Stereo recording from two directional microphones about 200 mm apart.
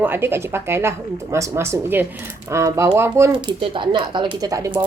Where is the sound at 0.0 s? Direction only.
10° right (ahead or behind).